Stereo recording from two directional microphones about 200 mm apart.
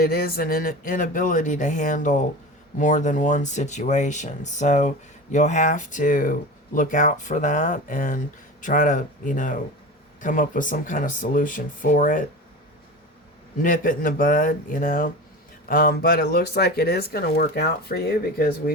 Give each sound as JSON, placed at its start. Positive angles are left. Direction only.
{"t": 0.0, "sound": "speech", "side_deg": 50}
{"t": 13.6, "sound": "speech", "side_deg": 45}